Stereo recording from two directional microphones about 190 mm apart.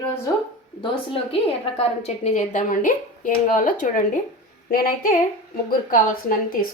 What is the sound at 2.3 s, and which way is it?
Speech, 40° left (ahead or behind).